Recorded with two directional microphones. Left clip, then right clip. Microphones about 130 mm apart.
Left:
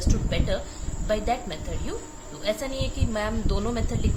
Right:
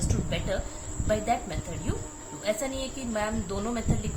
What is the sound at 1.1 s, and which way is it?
A woman's voice, 30° left (ahead or behind).